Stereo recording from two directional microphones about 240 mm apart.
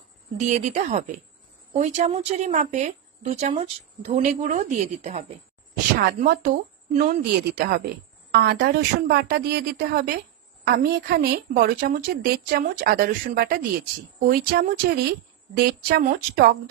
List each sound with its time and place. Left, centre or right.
0.4 s a woman's voice: right